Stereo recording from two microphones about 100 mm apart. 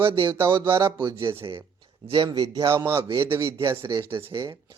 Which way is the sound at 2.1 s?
50° right (ahead or behind).